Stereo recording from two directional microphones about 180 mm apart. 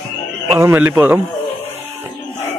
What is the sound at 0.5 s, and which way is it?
Speech, 10° right (ahead or behind).